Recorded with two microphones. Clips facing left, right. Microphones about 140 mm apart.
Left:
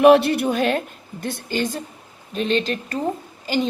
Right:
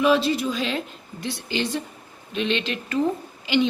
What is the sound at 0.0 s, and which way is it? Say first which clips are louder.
A woman's voice: left 7 dB; 60° left (ahead or behind).